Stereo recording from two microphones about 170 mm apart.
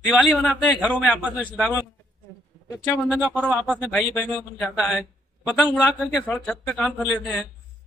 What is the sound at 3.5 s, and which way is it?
Speech, centre (ahead or behind).